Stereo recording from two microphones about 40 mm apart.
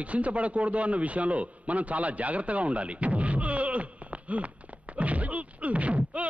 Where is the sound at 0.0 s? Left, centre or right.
Right.